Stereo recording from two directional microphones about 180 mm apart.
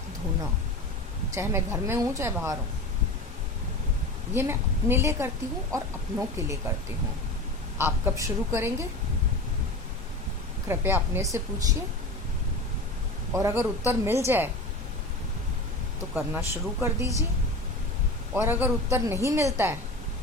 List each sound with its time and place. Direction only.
1.3 s a woman's voice: 15° right (ahead or behind)
4.4 s a woman's voice: 10° right (ahead or behind)
7.8 s a woman's voice: 15° right (ahead or behind)
10.7 s a woman's voice: 10° right (ahead or behind)
13.3 s a woman's voice: 15° right (ahead or behind)
16.1 s a woman's voice: 10° right (ahead or behind)
18.3 s a woman's voice: 15° right (ahead or behind)